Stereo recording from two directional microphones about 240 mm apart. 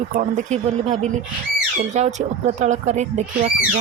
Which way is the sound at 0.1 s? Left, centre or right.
Right.